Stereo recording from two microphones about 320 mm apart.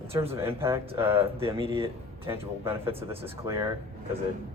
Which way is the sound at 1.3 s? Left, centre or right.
Centre.